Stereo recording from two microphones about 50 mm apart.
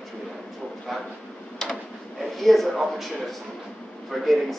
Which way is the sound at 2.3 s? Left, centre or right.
Centre.